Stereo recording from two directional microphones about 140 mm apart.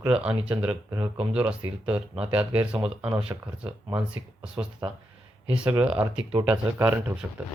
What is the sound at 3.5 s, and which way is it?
Speech, 10° right (ahead or behind).